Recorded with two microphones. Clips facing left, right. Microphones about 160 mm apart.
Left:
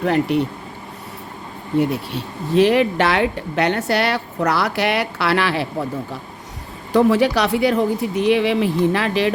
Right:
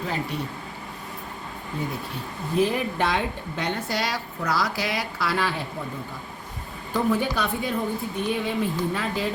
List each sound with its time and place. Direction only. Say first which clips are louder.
0.0 s speech: left 11 dB; 65° left (ahead or behind)
1.8 s speech: left 9 dB; 75° left (ahead or behind)
6.9 s speech: left 9 dB; 90° left